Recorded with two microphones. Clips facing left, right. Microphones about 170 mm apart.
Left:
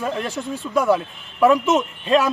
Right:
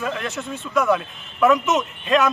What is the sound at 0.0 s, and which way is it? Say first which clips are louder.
A man's voice: left 2 dB; 30° left (ahead or behind).